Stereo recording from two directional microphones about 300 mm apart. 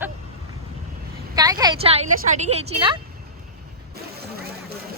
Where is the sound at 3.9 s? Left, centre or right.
Right.